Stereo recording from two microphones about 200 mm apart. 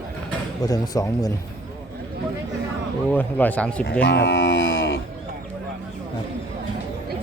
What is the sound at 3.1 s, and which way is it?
Speech, 10° left (ahead or behind).